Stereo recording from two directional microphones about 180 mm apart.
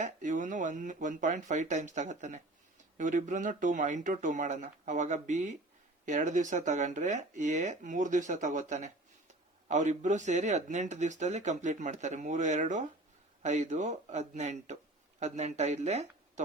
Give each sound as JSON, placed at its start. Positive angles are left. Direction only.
{"t": 0.0, "sound": "speech", "side_deg": -45}